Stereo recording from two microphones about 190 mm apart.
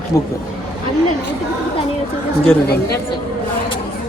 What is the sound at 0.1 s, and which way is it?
Speech, 15° left (ahead or behind).